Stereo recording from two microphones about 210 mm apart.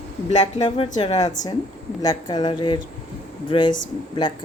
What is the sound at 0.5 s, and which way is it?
Speech, 20° left (ahead or behind).